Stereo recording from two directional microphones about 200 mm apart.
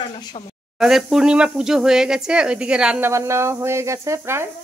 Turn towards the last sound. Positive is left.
turn(degrees=-10)  # may be behind; listen again after turning